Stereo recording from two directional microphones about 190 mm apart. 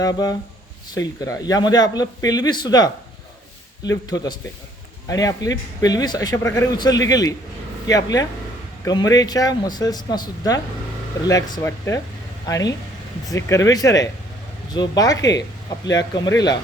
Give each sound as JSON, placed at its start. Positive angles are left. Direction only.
{"t": 0.0, "sound": "speech", "side_deg": 20}